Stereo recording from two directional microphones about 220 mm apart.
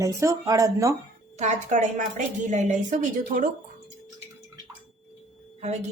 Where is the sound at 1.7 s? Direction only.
35° right (ahead or behind).